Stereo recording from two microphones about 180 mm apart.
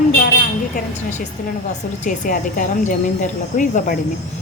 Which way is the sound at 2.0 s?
45° left (ahead or behind).